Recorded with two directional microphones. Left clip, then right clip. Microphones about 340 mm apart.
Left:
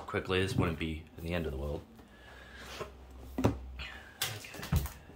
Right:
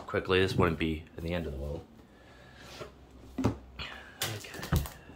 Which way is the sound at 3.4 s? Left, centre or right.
Centre.